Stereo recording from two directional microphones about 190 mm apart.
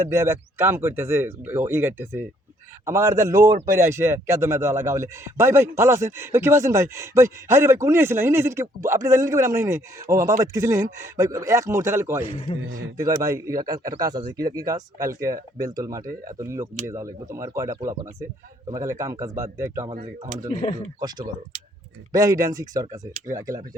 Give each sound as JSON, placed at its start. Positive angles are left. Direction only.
{"t": 0.0, "sound": "a man's voice", "side_deg": -15}
{"t": 12.2, "sound": "a man's voice", "side_deg": 30}
{"t": 12.6, "sound": "speech", "side_deg": -90}
{"t": 13.2, "sound": "a man's voice", "side_deg": -15}
{"t": 21.0, "sound": "speech", "side_deg": -20}